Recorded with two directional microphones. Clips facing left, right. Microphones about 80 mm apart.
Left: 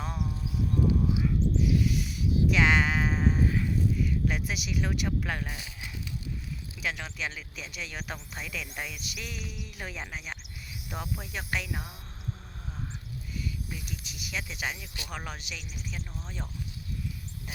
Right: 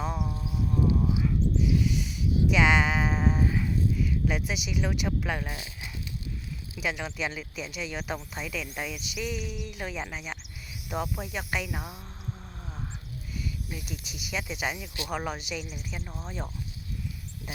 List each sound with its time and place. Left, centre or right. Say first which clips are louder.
0.0 s a sound: right 3 dB; centre
6.7 s speech: right 4 dB; centre
11.0 s speech: right 4 dB; centre
13.7 s speech: right 2 dB; centre
15.4 s speech: right 6 dB; centre